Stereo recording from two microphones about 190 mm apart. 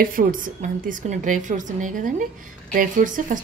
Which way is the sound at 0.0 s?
45° right (ahead or behind).